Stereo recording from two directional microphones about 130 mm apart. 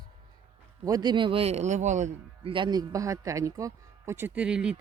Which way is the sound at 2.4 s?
40° right (ahead or behind).